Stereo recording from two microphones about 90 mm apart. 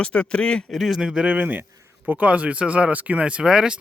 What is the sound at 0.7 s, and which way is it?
Speech, centre (ahead or behind).